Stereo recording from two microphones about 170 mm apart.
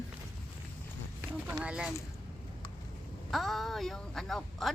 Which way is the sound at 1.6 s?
5° right (ahead or behind).